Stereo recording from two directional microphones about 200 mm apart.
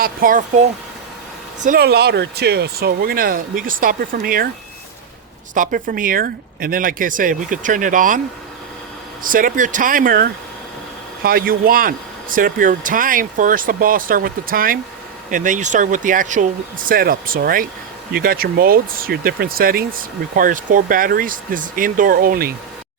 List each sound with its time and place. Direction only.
0.0 s speech: 45° right (ahead or behind)
5.5 s speech: 45° right (ahead or behind)
9.2 s speech: 45° right (ahead or behind)